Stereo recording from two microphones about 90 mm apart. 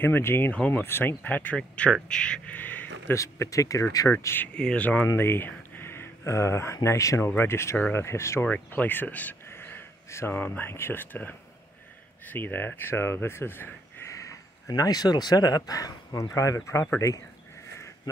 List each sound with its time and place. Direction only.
0.0 s speech: 25° left (ahead or behind)
3.2 s speech: 35° left (ahead or behind)
4.1 s speech: 25° left (ahead or behind)
4.6 s speech: 10° left (ahead or behind)
5.0 s speech: 25° left (ahead or behind)
8.5 s speech: 15° left (ahead or behind); by 14.4 s 35° left (ahead or behind)
14.7 s speech: 45° left (ahead or behind); by 17.1 s 30° left (ahead or behind)